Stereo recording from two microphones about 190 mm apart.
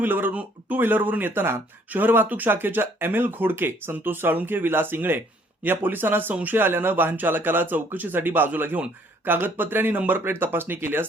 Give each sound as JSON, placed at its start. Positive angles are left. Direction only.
{"t": 0.0, "sound": "speech", "side_deg": -10}